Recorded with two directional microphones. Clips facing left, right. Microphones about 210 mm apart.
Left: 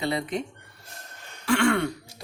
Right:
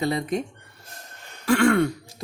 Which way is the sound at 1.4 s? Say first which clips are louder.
Right 4 dB; 45° right (ahead or behind).